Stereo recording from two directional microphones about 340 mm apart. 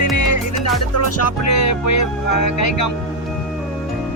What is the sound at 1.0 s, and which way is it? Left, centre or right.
Music, left.